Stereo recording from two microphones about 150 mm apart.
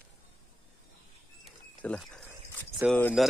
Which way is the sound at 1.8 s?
5° left (ahead or behind).